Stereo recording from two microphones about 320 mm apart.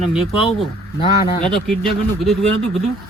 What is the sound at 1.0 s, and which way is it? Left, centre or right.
Speech, centre.